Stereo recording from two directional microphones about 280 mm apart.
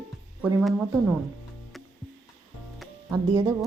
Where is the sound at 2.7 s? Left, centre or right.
Centre.